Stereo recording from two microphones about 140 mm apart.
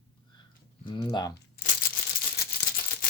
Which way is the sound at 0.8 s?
35° left (ahead or behind).